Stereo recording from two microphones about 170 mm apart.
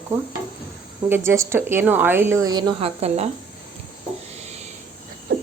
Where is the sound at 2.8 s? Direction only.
35° right (ahead or behind).